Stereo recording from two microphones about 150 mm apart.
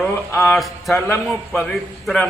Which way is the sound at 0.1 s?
20° left (ahead or behind).